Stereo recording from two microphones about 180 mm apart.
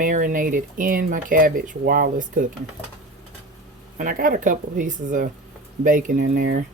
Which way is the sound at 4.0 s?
50° right (ahead or behind).